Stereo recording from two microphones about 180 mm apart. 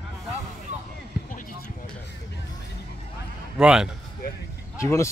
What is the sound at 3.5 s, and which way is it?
Speech, 5° right (ahead or behind).